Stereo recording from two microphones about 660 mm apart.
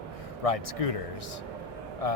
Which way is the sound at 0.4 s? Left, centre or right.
Left.